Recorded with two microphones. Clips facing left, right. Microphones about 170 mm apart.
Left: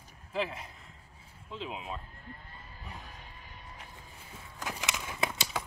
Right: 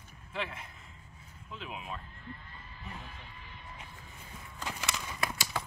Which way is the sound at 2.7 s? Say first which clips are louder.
Right 2 dB; 45° left (ahead or behind).